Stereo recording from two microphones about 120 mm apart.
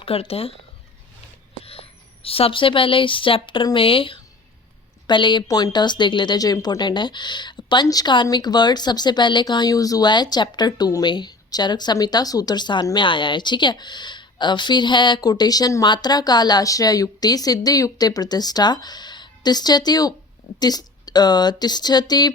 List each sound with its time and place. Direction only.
0.0 s speech: 55° left (ahead or behind)
1.6 s speech: 55° left (ahead or behind); by 22.3 s 35° left (ahead or behind)